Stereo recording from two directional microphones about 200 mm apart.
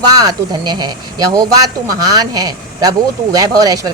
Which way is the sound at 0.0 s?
20° right (ahead or behind).